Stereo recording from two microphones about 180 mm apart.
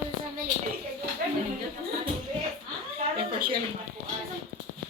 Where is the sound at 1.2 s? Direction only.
50° right (ahead or behind).